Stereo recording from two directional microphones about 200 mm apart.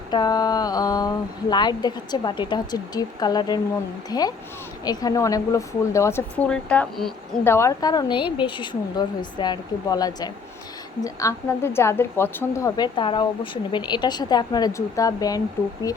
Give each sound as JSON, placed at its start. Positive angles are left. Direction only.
{"t": 0.1, "sound": "a woman's voice", "side_deg": 20}